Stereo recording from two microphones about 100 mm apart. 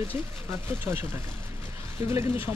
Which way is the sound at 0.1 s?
20° right (ahead or behind).